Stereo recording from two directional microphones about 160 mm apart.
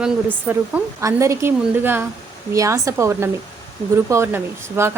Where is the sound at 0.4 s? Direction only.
15° right (ahead or behind).